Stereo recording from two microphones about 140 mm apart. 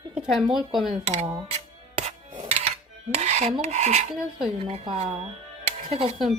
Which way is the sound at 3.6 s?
50° right (ahead or behind).